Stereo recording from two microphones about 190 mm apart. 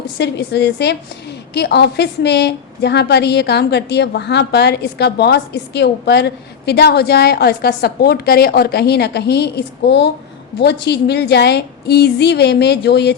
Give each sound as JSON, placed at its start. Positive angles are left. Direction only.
{"t": 0.2, "sound": "a woman's voice", "side_deg": 60}